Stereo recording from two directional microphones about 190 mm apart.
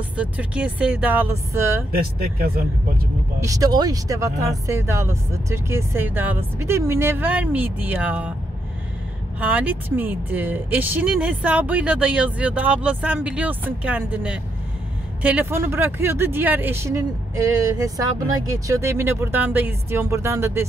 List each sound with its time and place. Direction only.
0.2 s speech: 5° right (ahead or behind)
1.9 s speech: 55° right (ahead or behind)
3.3 s speech: 15° right (ahead or behind)
9.4 s speech: 10° right (ahead or behind)